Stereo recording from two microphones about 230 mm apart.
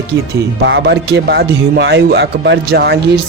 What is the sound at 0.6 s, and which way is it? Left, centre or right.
Speech, right.